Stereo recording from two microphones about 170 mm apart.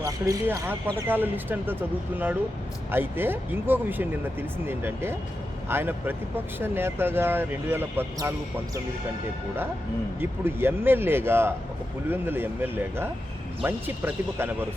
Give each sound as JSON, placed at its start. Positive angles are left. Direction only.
{"t": 0.0, "sound": "speech", "side_deg": -20}
{"t": 10.2, "sound": "speech", "side_deg": -10}